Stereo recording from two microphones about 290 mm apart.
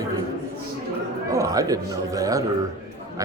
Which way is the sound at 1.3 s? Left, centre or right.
Centre.